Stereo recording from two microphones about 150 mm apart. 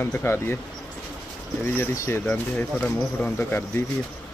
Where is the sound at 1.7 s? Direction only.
15° left (ahead or behind).